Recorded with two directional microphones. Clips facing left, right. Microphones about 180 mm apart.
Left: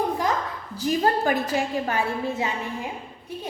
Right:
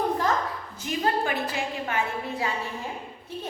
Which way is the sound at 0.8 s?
40° left (ahead or behind).